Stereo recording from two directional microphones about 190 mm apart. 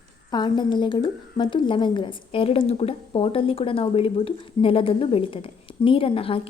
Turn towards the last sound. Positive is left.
turn(degrees=30)  # may be behind; listen again after turning